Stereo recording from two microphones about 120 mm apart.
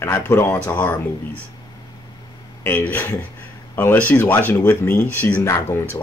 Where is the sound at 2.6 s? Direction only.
15° left (ahead or behind).